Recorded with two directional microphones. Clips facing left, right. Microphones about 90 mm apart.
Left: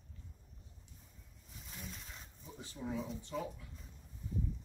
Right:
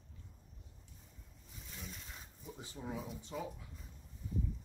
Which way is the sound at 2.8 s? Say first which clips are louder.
Left 3 dB; 5° right (ahead or behind).